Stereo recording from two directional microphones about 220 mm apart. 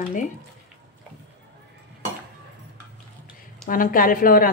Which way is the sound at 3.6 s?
40° left (ahead or behind).